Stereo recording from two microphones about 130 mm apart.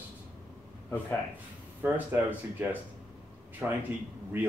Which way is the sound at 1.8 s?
15° right (ahead or behind).